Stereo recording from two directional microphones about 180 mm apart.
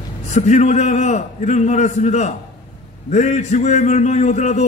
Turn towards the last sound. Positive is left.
turn(degrees=40)  # may be behind; listen again after turning